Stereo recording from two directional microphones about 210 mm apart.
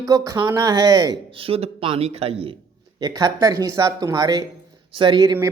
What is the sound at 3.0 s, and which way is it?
Speech, 15° right (ahead or behind).